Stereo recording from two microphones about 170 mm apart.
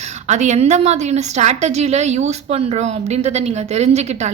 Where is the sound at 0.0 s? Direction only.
45° right (ahead or behind).